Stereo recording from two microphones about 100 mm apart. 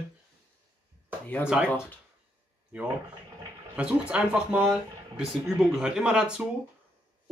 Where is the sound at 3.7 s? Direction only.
10° right (ahead or behind).